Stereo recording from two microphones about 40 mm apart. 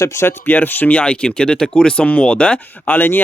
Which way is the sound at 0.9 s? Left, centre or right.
Left.